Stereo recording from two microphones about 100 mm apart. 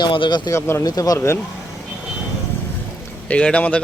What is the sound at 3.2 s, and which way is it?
Speech, 10° left (ahead or behind).